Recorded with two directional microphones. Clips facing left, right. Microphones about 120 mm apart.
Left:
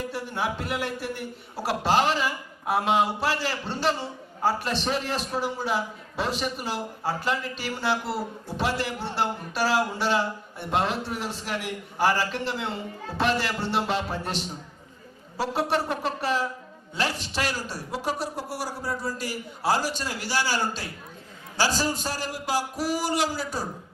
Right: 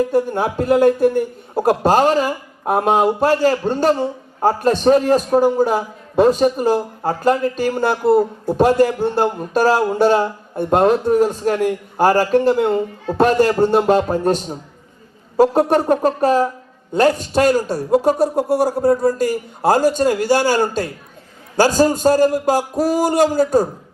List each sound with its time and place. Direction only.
0.0 s speech: 45° right (ahead or behind)